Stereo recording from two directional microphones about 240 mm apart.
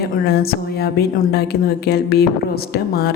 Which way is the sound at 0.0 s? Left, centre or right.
Left.